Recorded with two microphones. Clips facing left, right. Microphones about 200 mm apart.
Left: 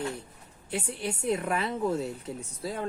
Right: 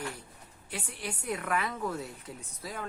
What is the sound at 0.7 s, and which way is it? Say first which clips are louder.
Speech: left 7 dB; 25° left (ahead or behind).